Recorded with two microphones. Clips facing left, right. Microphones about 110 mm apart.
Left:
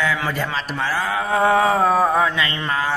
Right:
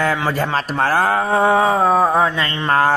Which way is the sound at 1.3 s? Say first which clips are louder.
Left 1 dB; 25° right (ahead or behind).